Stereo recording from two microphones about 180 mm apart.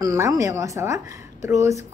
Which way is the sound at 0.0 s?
20° right (ahead or behind).